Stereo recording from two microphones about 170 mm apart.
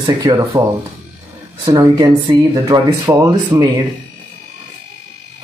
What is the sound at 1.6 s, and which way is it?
Speech, 20° right (ahead or behind).